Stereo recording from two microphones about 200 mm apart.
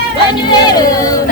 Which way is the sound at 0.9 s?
15° left (ahead or behind).